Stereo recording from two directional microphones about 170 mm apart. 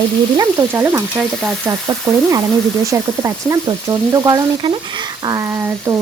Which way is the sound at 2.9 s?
15° right (ahead or behind).